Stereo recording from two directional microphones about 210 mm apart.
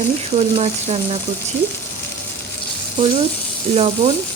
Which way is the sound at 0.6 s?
30° right (ahead or behind).